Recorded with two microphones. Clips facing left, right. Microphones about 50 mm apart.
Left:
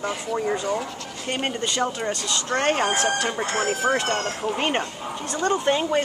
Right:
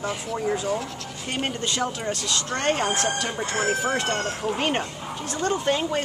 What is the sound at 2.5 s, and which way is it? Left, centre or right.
Speech, left.